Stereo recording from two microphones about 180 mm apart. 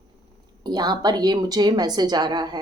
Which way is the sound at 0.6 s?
25° right (ahead or behind).